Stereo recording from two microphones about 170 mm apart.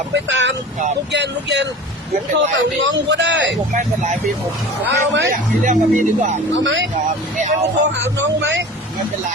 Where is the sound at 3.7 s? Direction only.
45° right (ahead or behind).